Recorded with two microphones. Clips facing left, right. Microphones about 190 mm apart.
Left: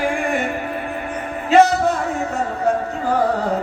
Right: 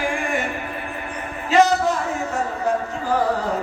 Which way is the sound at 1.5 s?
60° left (ahead or behind).